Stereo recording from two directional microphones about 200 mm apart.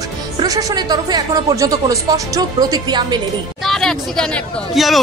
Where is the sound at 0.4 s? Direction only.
20° right (ahead or behind).